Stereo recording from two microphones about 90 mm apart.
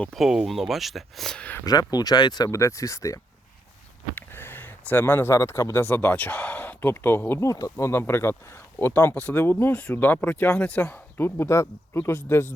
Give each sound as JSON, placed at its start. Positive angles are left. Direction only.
{"t": 0.2, "sound": "speech", "side_deg": -5}
{"t": 1.4, "sound": "speech", "side_deg": 20}
{"t": 1.6, "sound": "speech", "side_deg": 45}
{"t": 2.5, "sound": "speech", "side_deg": 35}
{"t": 4.1, "sound": "speech", "side_deg": 25}
{"t": 5.8, "sound": "speech", "side_deg": 20}
{"t": 7.4, "sound": "speech", "side_deg": 40}